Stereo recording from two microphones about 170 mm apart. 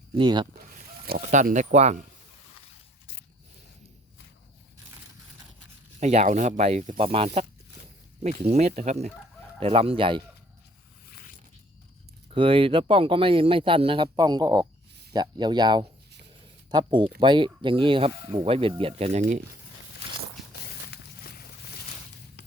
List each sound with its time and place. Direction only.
0.1 s speech: 25° right (ahead or behind)
1.3 s speech: 45° right (ahead or behind)
6.0 s speech: 45° right (ahead or behind)
12.3 s speech: 30° right (ahead or behind)
20.5 s a sound: 65° left (ahead or behind)